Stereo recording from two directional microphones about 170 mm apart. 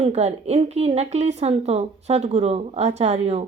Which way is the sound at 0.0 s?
40° right (ahead or behind).